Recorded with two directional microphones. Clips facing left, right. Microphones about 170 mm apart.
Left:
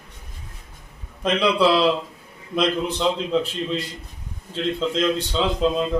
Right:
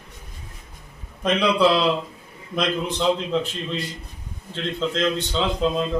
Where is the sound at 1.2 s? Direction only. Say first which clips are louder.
Even; centre (ahead or behind).